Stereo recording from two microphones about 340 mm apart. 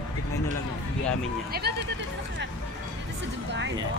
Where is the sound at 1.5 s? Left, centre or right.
Right.